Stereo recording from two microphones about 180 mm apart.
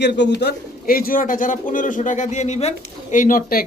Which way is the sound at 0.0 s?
70° left (ahead or behind).